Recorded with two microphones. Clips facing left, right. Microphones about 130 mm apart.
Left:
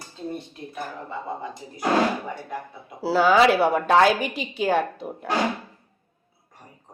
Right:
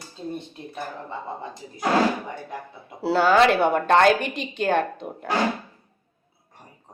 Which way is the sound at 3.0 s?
Centre (ahead or behind).